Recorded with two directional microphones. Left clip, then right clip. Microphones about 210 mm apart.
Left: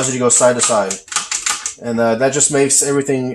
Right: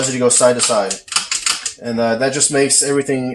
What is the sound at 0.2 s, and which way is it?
Speech, 25° left (ahead or behind).